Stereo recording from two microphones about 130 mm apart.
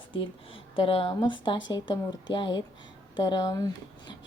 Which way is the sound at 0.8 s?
45° left (ahead or behind).